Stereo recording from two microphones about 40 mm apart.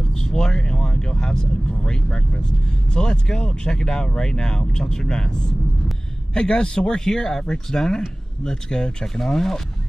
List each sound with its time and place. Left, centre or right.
0.1 s speech: centre